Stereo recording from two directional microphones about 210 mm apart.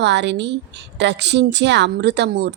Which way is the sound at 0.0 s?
55° right (ahead or behind).